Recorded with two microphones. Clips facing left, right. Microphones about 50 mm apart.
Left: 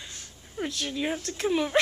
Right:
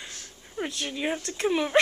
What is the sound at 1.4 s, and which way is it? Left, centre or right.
Speech, centre.